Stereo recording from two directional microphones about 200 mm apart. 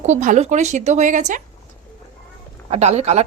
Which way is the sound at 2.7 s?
35° right (ahead or behind).